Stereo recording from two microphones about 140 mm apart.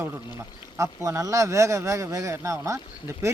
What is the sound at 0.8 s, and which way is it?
Speech, 25° right (ahead or behind).